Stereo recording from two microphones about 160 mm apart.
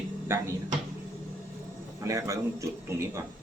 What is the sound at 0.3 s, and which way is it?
Speech, 15° right (ahead or behind).